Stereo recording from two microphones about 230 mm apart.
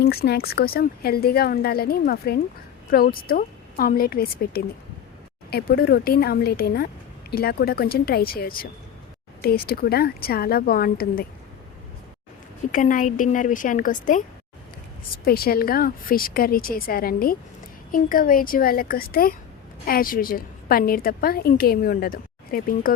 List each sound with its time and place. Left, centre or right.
0.0 s speech: left
12.7 s speech: left